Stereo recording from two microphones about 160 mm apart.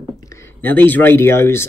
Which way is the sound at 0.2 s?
20° left (ahead or behind).